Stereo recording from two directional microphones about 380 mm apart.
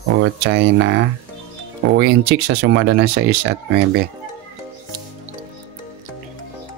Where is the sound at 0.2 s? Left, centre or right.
Right.